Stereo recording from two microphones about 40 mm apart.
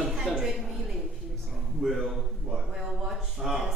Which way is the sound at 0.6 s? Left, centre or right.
Centre.